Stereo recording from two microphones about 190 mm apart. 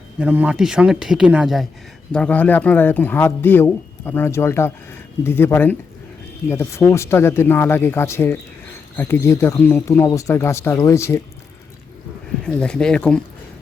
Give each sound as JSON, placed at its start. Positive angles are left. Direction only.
{"t": 0.2, "sound": "speech", "side_deg": -10}
{"t": 12.5, "sound": "speech", "side_deg": 5}